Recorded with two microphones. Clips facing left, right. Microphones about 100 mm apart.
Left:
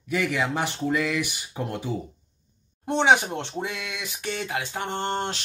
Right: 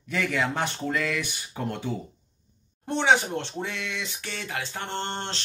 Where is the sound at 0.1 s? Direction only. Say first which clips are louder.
Left 2 dB; 10° left (ahead or behind).